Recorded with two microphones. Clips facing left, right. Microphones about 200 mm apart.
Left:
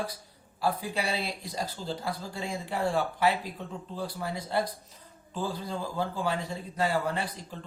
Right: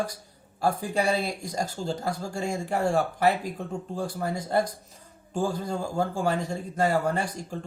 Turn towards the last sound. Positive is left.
turn(degrees=-45)  # may be behind; listen again after turning